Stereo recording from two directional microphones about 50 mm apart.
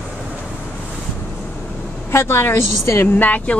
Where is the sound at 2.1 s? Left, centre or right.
Left.